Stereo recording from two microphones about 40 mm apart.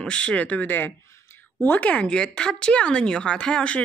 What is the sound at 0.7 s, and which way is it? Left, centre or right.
Speech, left.